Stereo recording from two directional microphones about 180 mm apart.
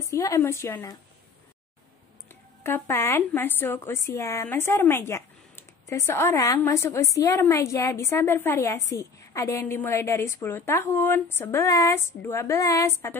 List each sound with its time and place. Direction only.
0.0 s speech: 15° left (ahead or behind)
2.6 s speech: 15° left (ahead or behind)